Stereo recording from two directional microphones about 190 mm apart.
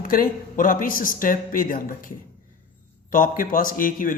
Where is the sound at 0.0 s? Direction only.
45° left (ahead or behind).